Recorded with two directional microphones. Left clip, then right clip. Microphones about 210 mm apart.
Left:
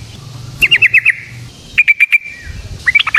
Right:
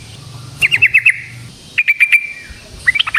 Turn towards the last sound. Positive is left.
turn(degrees=20)  # may be behind; listen again after turning